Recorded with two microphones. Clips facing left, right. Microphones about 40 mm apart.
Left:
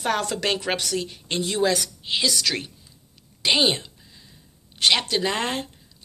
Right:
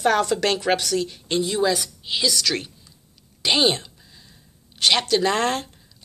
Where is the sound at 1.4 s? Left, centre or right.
Left.